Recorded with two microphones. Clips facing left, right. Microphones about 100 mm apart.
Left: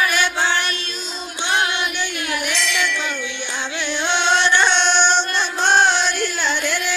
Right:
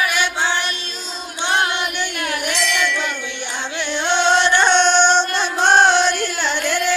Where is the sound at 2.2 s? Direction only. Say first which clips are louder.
Right 2 dB; 50° right (ahead or behind).